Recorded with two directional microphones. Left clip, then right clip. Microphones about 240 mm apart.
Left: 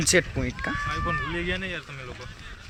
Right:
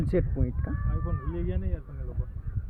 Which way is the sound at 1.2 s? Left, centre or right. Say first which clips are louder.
Left 8 dB; centre.